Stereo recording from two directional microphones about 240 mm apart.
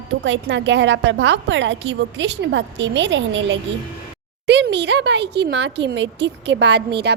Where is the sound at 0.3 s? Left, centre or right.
Right.